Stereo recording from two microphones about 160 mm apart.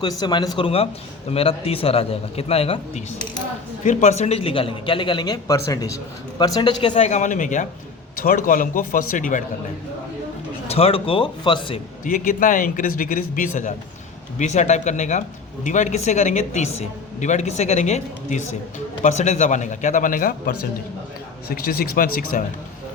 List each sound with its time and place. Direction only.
0.0 s a man's voice: 25° left (ahead or behind); by 9.4 s 55° left (ahead or behind)
10.7 s a man's voice: 35° left (ahead or behind)
12.0 s a man's voice: 55° left (ahead or behind)
21.5 s a man's voice: 70° left (ahead or behind)